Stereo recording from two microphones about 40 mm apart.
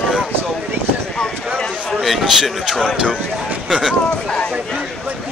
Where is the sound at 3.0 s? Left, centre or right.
Right.